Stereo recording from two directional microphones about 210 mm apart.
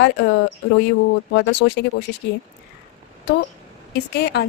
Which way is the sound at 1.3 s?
55° left (ahead or behind).